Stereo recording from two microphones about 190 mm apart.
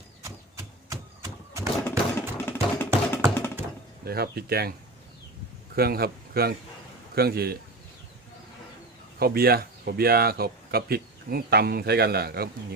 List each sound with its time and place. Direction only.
0.2 s a sound: 15° right (ahead or behind)
1.8 s music: 10° left (ahead or behind)
4.0 s speech: 55° right (ahead or behind)
5.7 s a man's voice: 55° right (ahead or behind)
9.1 s speech: 55° right (ahead or behind)